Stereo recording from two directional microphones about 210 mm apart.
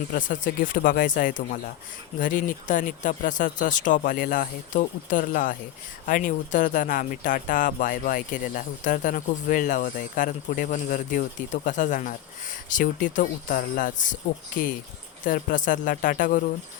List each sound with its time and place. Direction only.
0.1 s speech: 40° left (ahead or behind)